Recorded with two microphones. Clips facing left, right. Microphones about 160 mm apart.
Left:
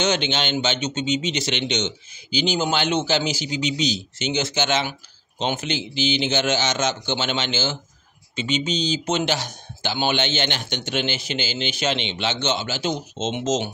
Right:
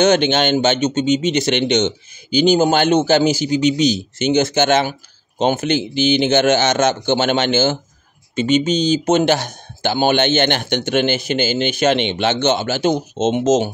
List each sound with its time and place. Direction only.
0.0 s speech: 50° right (ahead or behind)